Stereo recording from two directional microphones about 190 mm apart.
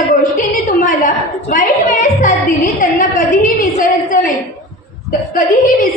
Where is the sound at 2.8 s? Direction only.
45° left (ahead or behind).